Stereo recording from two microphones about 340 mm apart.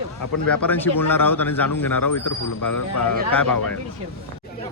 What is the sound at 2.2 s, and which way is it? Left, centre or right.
Speech, left.